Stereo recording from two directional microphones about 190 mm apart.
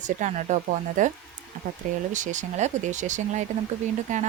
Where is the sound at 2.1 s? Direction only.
40° right (ahead or behind).